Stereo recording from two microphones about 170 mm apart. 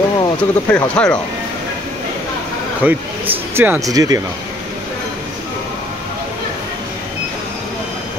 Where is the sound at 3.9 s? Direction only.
20° right (ahead or behind).